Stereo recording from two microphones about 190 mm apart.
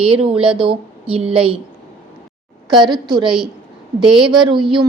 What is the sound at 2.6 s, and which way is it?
A woman's voice, 25° right (ahead or behind).